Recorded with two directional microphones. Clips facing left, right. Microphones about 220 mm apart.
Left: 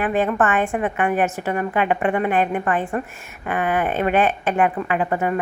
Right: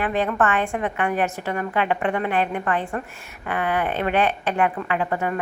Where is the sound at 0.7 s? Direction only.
20° left (ahead or behind).